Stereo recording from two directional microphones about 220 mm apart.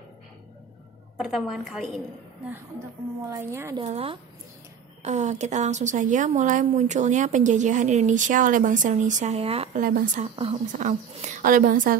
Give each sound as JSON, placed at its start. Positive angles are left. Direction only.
{"t": 1.1, "sound": "a woman's voice", "side_deg": 0}
{"t": 3.3, "sound": "a woman's voice", "side_deg": -10}
{"t": 3.7, "sound": "speech", "side_deg": -25}
{"t": 9.8, "sound": "speech", "side_deg": -40}
{"t": 10.3, "sound": "speech", "side_deg": -25}